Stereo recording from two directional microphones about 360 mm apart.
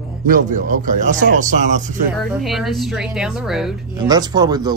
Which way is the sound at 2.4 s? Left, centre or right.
Centre.